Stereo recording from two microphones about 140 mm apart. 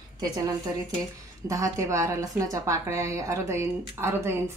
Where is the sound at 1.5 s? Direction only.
25° right (ahead or behind).